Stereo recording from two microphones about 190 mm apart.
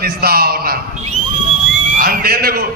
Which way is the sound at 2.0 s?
50° right (ahead or behind).